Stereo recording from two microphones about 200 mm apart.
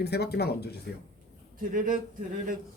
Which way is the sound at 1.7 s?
40° right (ahead or behind).